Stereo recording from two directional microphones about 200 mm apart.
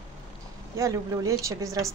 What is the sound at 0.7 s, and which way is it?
Speech, 15° right (ahead or behind).